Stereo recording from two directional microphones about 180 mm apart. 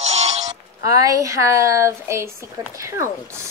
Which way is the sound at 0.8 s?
20° right (ahead or behind).